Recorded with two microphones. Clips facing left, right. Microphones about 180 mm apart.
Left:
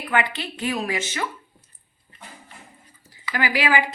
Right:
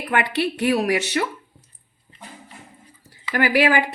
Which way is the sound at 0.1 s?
65° right (ahead or behind).